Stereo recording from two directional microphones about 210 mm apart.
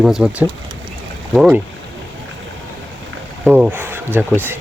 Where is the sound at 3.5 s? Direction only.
10° right (ahead or behind).